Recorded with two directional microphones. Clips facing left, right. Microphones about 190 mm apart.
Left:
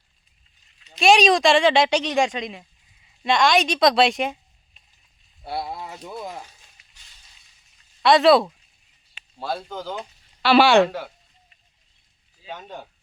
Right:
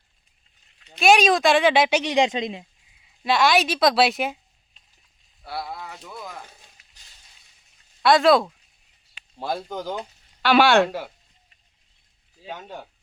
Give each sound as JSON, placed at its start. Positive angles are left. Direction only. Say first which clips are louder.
{"t": 0.9, "sound": "speech", "louder": "left 1 dB", "side_deg": 0}
{"t": 2.1, "sound": "speech", "louder": "right 1 dB", "side_deg": -20}
{"t": 3.2, "sound": "speech", "louder": "left 1 dB", "side_deg": -5}
{"t": 5.4, "sound": "speech", "louder": "left 3 dB", "side_deg": 25}
{"t": 8.0, "sound": "speech", "louder": "left 2 dB", "side_deg": 0}
{"t": 9.4, "sound": "speech", "louder": "right 1 dB", "side_deg": -15}
{"t": 10.5, "sound": "speech", "louder": "left 2 dB", "side_deg": 0}
{"t": 12.5, "sound": "speech", "louder": "even", "side_deg": -5}